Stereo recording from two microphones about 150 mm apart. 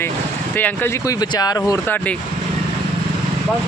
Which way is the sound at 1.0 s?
25° left (ahead or behind).